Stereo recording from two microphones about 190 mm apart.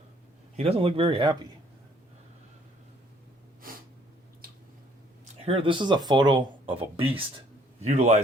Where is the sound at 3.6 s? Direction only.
45° right (ahead or behind).